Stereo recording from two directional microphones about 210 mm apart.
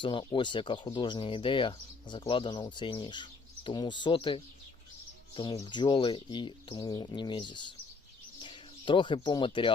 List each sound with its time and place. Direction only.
0.0 s speech: 25° left (ahead or behind)